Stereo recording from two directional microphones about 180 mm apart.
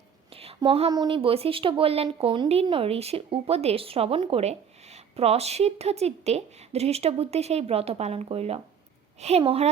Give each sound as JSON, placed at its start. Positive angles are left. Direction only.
{"t": 0.3, "sound": "speech", "side_deg": -30}